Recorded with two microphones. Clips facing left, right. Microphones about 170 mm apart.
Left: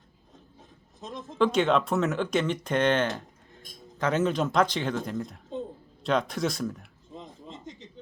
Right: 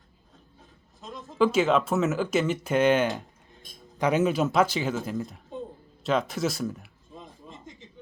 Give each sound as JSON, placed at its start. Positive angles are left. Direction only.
{"t": 1.4, "sound": "speech", "side_deg": -5}
{"t": 7.1, "sound": "chuckle", "side_deg": 20}